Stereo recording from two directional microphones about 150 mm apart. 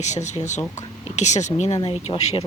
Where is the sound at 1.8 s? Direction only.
40° left (ahead or behind).